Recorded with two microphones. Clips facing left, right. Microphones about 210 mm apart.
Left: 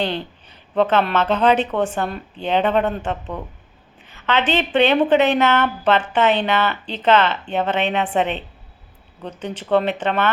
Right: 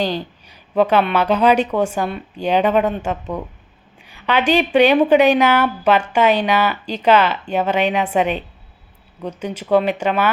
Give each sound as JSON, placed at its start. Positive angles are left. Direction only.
{"t": 0.0, "sound": "a woman's voice", "side_deg": -10}